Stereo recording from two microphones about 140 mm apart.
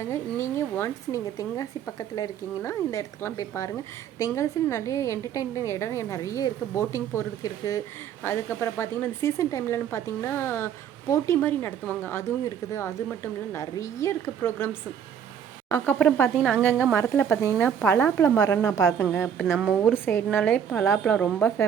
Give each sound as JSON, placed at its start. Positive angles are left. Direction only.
{"t": 0.0, "sound": "a woman's voice", "side_deg": 20}